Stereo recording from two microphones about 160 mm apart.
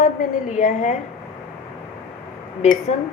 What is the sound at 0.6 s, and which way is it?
Speech, 45° left (ahead or behind).